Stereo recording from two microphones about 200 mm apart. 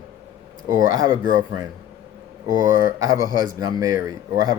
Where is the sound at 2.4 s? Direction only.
15° right (ahead or behind).